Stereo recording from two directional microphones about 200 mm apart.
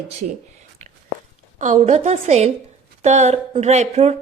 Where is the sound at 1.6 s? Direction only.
40° right (ahead or behind).